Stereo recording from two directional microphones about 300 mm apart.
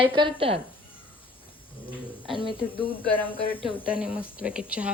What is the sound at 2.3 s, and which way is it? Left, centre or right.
Speech, centre.